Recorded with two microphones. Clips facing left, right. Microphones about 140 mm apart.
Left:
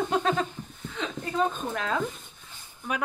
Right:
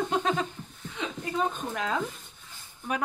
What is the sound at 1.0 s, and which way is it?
A woman's voice, 15° right (ahead or behind).